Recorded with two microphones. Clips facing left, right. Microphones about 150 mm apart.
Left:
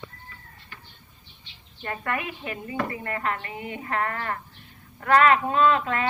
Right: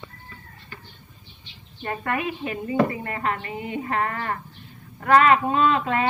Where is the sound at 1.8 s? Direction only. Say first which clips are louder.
Right 3 dB; 25° right (ahead or behind).